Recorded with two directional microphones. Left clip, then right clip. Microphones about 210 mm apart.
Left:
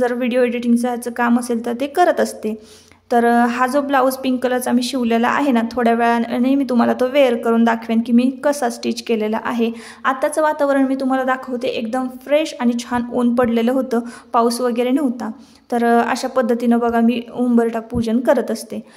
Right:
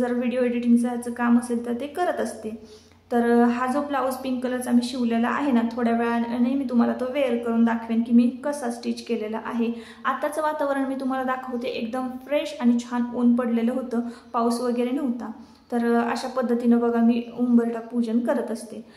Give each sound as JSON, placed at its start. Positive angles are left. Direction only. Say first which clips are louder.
{"t": 0.0, "sound": "a woman's voice", "louder": "left 7 dB", "side_deg": 45}